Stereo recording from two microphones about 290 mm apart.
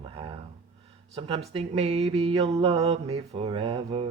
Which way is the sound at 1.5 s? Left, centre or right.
Right.